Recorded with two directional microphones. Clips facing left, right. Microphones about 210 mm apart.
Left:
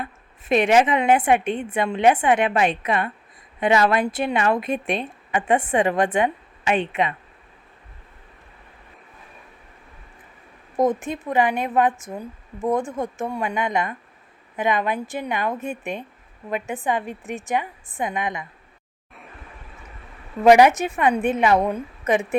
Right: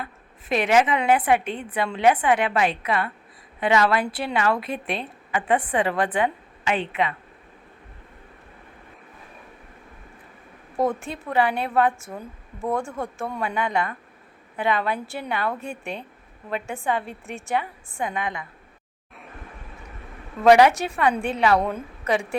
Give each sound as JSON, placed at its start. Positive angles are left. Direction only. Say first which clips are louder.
{"t": 0.0, "sound": "a woman's voice", "louder": "left 3 dB", "side_deg": 20}
{"t": 10.8, "sound": "a woman's voice", "louder": "left 3 dB", "side_deg": 20}
{"t": 20.4, "sound": "a woman's voice", "louder": "left 2 dB", "side_deg": 20}